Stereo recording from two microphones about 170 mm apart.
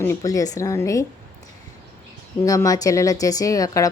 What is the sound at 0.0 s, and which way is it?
Speech, 20° left (ahead or behind).